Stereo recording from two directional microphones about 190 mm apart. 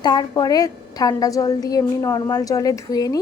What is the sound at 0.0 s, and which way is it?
Speech, 20° left (ahead or behind).